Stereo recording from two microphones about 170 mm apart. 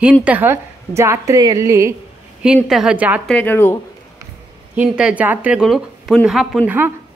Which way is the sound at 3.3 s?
10° left (ahead or behind).